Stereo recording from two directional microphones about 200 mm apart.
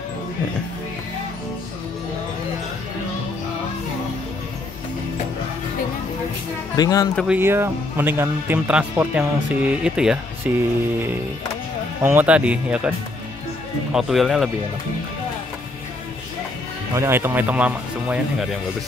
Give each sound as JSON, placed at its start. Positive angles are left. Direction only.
{"t": 6.8, "sound": "speech", "side_deg": 20}
{"t": 7.2, "sound": "speech", "side_deg": -5}
{"t": 12.0, "sound": "speech", "side_deg": -10}
{"t": 13.9, "sound": "speech", "side_deg": 0}
{"t": 16.9, "sound": "speech", "side_deg": -15}